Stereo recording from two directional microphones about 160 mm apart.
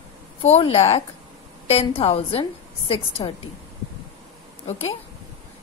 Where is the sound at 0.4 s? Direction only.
40° left (ahead or behind).